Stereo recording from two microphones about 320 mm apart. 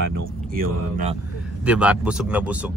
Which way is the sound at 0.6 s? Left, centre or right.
Right.